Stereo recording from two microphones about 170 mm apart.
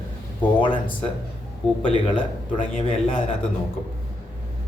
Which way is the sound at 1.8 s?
30° left (ahead or behind).